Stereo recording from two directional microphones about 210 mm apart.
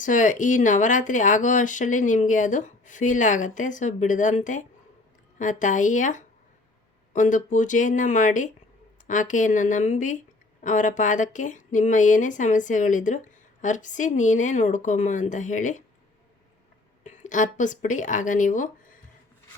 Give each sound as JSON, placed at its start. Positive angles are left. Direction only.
{"t": 0.0, "sound": "speech", "side_deg": 40}
{"t": 17.0, "sound": "speech", "side_deg": 35}